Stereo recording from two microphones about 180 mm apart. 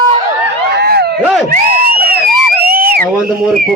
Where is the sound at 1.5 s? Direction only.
55° right (ahead or behind).